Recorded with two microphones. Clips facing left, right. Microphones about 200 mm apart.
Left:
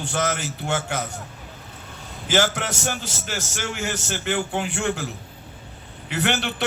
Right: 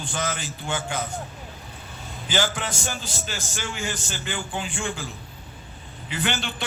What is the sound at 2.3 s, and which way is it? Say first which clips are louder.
A man's voice: left 4 dB; 70° left (ahead or behind).